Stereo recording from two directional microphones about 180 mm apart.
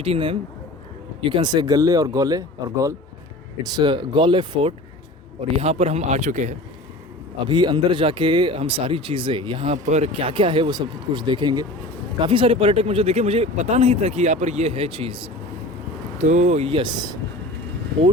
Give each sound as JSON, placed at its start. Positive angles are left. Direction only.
{"t": 0.0, "sound": "speech", "side_deg": -30}
{"t": 7.4, "sound": "speech", "side_deg": -25}
{"t": 9.7, "sound": "speech", "side_deg": -40}
{"t": 16.2, "sound": "speech", "side_deg": -40}